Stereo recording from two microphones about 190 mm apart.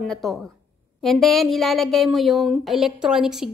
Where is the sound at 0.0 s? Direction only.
Centre (ahead or behind).